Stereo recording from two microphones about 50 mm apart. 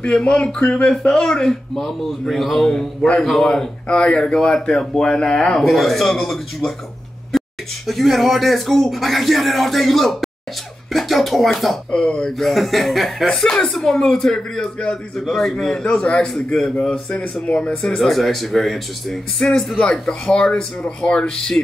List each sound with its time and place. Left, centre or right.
0.3 s speech: centre
3.8 s speech: centre
5.6 s speech: centre
11.9 s speech: centre
13.4 s speech: centre
17.6 s speech: centre
17.9 s speech: centre
19.8 s speech: centre